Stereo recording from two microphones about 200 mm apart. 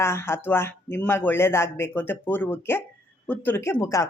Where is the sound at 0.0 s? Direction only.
15° left (ahead or behind).